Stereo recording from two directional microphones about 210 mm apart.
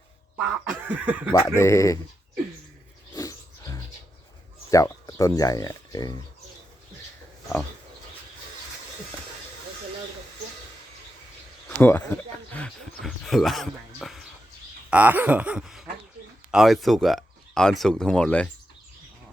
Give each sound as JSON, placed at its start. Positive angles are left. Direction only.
{"t": 0.3, "sound": "cough", "side_deg": -5}
{"t": 1.5, "sound": "speech", "side_deg": 15}
{"t": 3.2, "sound": "wild animals", "side_deg": 15}
{"t": 4.7, "sound": "speech", "side_deg": 15}
{"t": 11.8, "sound": "speech", "side_deg": 10}
{"t": 14.8, "sound": "a sound", "side_deg": -10}
{"t": 16.5, "sound": "speech", "side_deg": 0}